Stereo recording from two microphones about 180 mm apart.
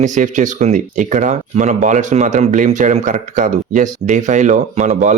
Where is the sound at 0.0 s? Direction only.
45° right (ahead or behind).